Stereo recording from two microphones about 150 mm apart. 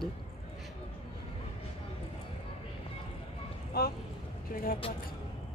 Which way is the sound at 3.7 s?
90° left.